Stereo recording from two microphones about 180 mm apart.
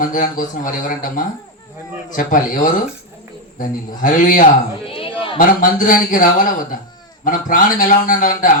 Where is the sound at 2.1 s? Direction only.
50° left (ahead or behind).